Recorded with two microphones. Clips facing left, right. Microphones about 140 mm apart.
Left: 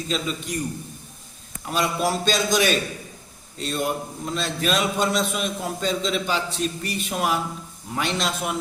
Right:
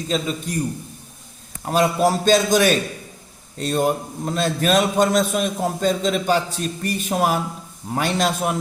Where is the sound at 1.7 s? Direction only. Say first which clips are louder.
Right 6 dB; 45° right (ahead or behind).